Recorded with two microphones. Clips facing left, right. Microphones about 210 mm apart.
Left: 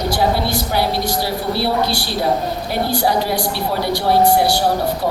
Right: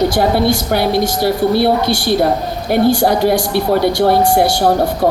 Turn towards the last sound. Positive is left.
turn(degrees=-50)  # may be behind; listen again after turning